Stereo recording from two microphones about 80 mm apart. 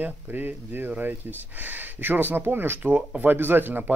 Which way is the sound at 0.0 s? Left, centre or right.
Right.